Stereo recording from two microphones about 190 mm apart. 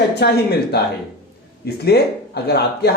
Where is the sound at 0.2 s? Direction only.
60° left (ahead or behind).